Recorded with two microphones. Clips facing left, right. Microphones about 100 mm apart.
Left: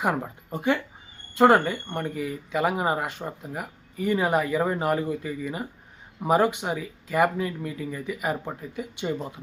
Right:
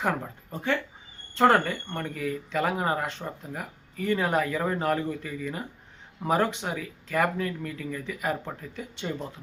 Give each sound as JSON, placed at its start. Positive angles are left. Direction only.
{"t": 0.0, "sound": "speech", "side_deg": 15}